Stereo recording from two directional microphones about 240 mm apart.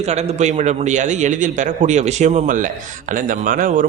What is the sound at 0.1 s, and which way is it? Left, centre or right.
A man's voice, right.